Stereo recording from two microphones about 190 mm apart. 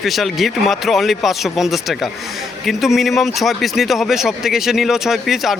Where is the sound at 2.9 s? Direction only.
Centre (ahead or behind).